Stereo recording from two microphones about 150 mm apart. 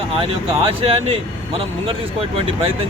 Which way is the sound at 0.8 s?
40° right (ahead or behind).